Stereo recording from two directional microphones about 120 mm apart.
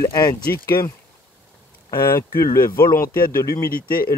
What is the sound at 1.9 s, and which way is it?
Speech, 25° left (ahead or behind).